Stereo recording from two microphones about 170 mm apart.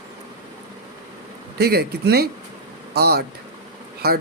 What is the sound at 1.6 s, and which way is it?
Speech, 70° right (ahead or behind).